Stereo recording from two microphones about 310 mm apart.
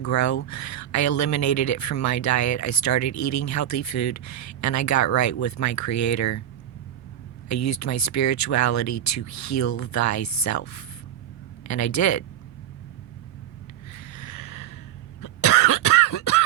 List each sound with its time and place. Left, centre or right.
0.0 s speech: left
7.4 s speech: left
13.9 s a sound: left
15.2 s cough: left